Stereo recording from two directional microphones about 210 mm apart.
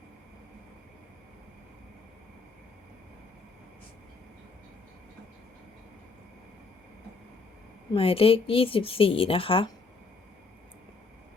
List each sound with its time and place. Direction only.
7.9 s speech: 25° left (ahead or behind)